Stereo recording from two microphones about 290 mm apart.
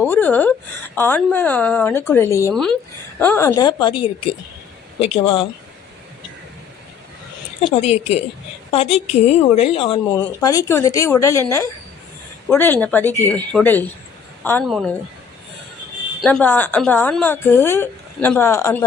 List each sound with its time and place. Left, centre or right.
0.0 s a woman's voice: centre
7.6 s a woman's voice: left; by 14.9 s centre
16.2 s speech: centre